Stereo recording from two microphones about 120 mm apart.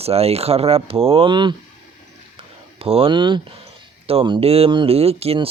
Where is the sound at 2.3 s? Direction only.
50° right (ahead or behind).